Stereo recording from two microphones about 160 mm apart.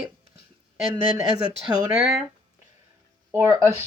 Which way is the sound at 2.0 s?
5° right (ahead or behind).